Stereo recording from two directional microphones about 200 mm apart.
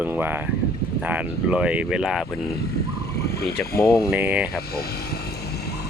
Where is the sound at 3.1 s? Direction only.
50° left (ahead or behind).